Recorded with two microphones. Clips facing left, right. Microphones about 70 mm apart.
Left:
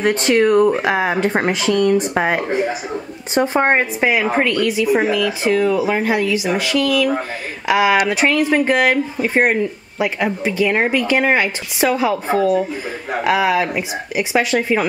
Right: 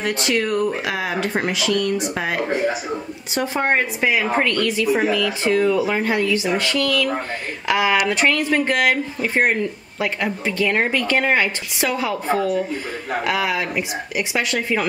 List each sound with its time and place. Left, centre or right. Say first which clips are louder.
0.0 s speech: left 7 dB; left; by 14.9 s centre